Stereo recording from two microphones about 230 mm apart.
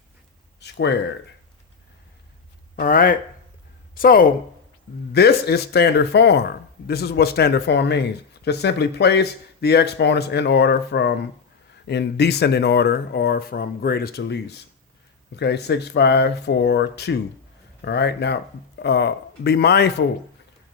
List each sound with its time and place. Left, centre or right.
0.6 s speech: left
2.7 s speech: left